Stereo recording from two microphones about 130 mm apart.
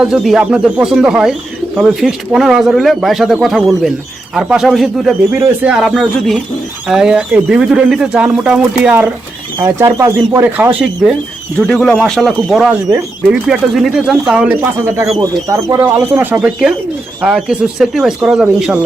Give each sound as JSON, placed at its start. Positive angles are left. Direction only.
{"t": 0.0, "sound": "speech", "side_deg": -5}
{"t": 9.6, "sound": "speech", "side_deg": -20}
{"t": 11.5, "sound": "speech", "side_deg": 5}
{"t": 15.2, "sound": "speech", "side_deg": -25}